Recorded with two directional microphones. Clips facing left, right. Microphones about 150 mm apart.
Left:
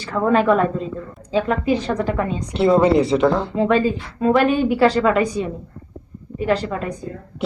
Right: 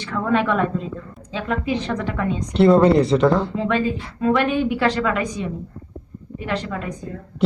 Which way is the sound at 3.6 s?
35° left (ahead or behind).